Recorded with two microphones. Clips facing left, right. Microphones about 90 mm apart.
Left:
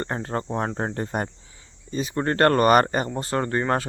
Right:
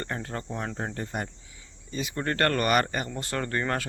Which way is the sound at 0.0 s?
30° left (ahead or behind).